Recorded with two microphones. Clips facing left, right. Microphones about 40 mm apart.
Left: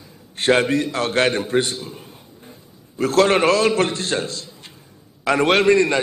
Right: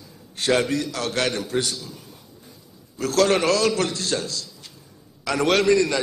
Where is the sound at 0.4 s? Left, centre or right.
Left.